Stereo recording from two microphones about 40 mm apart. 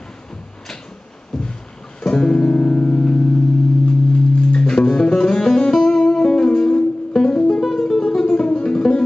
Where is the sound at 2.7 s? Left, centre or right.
Left.